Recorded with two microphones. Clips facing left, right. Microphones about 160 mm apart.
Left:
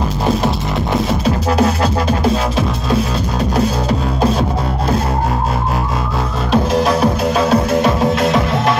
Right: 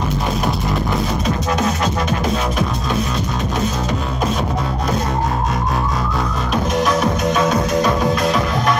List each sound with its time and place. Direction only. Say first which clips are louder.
1.2 s music: left 4 dB; 30° left (ahead or behind)
6.5 s music: left 4 dB; 30° left (ahead or behind)